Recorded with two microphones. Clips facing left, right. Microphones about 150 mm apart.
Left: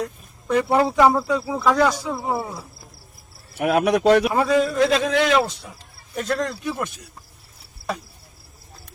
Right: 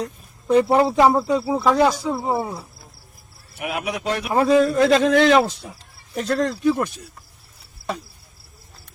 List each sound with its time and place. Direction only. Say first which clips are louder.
0.0 s speech: even; 30° right (ahead or behind)
3.6 s speech: left 9 dB; 70° left (ahead or behind)
4.3 s speech: right 3 dB; 30° right (ahead or behind)
4.6 s a man's voice: right 3 dB; 45° right (ahead or behind)